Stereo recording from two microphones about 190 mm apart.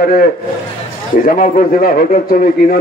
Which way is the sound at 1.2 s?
45° left (ahead or behind).